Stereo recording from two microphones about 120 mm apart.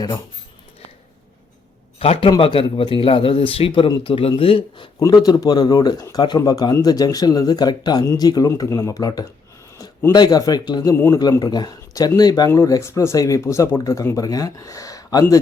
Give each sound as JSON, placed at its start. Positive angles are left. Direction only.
{"t": 2.0, "sound": "speech", "side_deg": 55}
{"t": 5.0, "sound": "speech", "side_deg": 35}
{"t": 10.9, "sound": "speech", "side_deg": 20}
{"t": 11.2, "sound": "speech", "side_deg": 35}